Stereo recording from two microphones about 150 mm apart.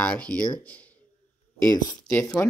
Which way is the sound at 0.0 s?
5° left (ahead or behind).